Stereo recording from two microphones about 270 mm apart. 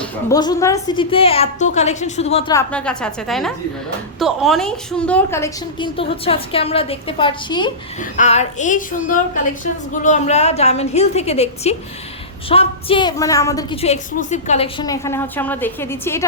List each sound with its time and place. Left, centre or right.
0.0 s a woman's voice: centre
13.8 s a woman's voice: left; by 16.2 s centre